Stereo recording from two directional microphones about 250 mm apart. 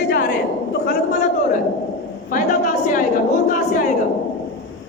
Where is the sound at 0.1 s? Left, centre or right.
Left.